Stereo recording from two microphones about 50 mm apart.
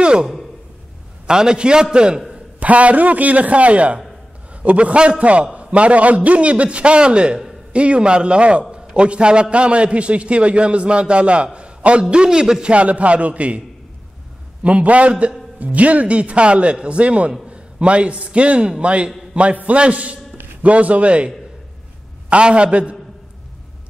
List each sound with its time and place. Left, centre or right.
0.0 s a sound: centre
1.2 s a man's voice: centre
2.3 s a man's voice: right
14.6 s a man's voice: right
22.3 s a man's voice: right